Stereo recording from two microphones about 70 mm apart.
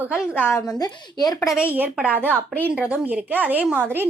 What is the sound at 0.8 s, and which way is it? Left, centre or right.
Speech, left.